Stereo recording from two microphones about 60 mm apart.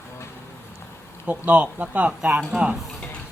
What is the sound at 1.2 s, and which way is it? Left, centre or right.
Speech, right.